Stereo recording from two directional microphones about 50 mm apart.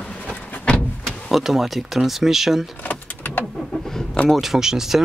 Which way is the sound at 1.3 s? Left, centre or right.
Centre.